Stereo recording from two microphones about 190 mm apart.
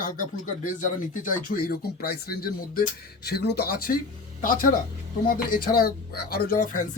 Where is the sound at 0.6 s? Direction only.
45° left (ahead or behind).